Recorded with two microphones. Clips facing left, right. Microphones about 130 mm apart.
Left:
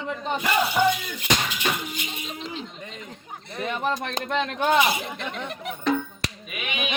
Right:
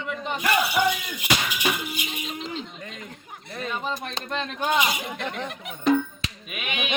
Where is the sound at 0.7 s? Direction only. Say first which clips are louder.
Left 2 dB; 10° right (ahead or behind).